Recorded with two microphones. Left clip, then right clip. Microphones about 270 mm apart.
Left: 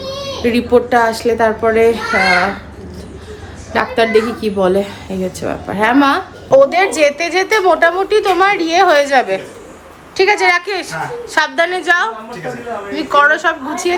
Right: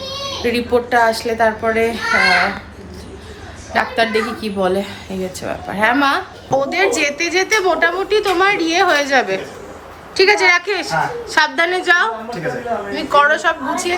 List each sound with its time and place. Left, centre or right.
0.4 s a woman's voice: centre
3.7 s a woman's voice: centre
6.5 s a woman's voice: centre